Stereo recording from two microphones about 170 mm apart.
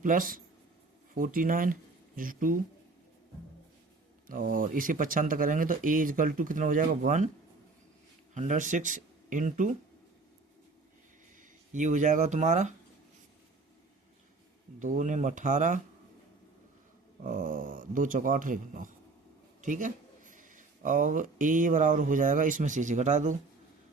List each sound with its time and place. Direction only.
0.0 s speech: 50° right (ahead or behind)
4.3 s speech: 55° right (ahead or behind)
8.3 s speech: 45° right (ahead or behind)
11.7 s speech: 45° right (ahead or behind)
14.8 s speech: 50° right (ahead or behind)
17.2 s speech: 50° right (ahead or behind)